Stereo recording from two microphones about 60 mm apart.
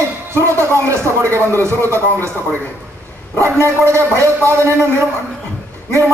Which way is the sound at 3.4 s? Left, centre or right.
Right.